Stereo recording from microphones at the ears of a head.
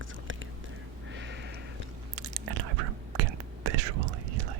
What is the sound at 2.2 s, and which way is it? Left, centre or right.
Whispering, right.